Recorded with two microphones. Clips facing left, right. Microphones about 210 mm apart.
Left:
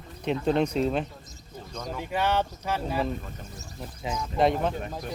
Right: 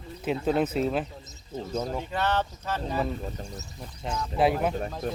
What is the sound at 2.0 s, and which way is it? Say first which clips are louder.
Speech: left 1 dB; 10° left (ahead or behind).